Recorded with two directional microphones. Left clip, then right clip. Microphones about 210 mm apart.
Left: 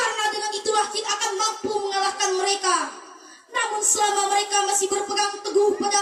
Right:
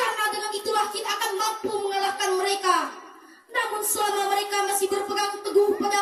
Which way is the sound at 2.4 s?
15° left (ahead or behind).